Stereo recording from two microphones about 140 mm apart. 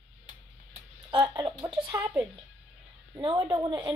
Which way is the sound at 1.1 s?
35° right (ahead or behind).